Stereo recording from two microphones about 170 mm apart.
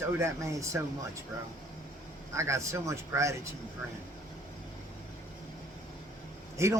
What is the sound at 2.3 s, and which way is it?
Speech, 15° right (ahead or behind).